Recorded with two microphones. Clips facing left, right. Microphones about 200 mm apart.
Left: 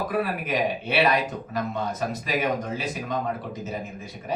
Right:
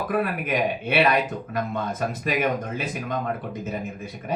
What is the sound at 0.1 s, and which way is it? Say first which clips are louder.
Speech: right 1 dB; 55° right (ahead or behind).